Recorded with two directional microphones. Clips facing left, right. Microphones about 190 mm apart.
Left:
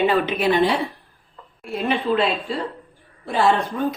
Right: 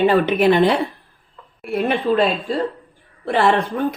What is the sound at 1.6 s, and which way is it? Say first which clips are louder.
Speech: right 3 dB; 55° right (ahead or behind).